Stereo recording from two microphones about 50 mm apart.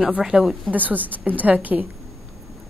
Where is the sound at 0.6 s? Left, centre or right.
Right.